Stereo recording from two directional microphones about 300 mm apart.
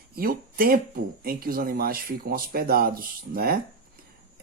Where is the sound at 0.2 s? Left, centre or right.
Right.